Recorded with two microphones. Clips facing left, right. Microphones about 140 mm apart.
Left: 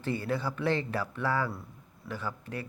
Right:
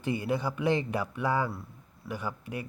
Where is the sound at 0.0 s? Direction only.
15° right (ahead or behind).